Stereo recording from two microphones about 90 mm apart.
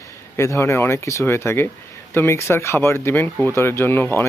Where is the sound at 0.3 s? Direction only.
30° left (ahead or behind).